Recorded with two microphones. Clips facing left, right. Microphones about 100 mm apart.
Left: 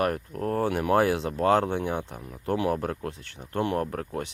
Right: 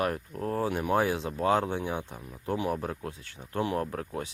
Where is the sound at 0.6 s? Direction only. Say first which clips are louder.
Left 4 dB; 75° left (ahead or behind).